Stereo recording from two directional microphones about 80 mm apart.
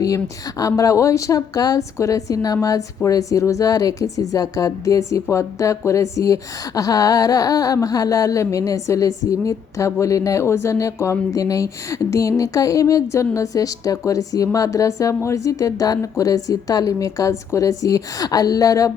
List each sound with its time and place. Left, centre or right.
0.6 s a woman's voice: left